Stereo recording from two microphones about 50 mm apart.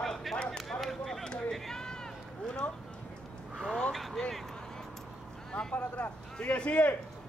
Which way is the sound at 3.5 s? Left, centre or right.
Centre.